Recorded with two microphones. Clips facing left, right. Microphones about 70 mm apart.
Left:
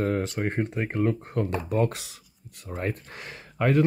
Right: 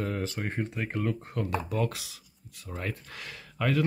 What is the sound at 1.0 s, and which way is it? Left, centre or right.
Speech, left.